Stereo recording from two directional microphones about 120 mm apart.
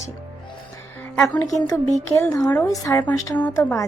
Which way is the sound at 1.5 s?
30° left (ahead or behind).